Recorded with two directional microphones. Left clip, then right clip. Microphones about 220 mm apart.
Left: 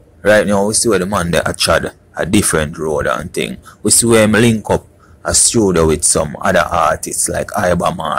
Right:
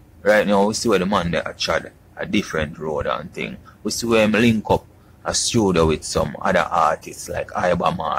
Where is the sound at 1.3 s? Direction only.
25° left (ahead or behind).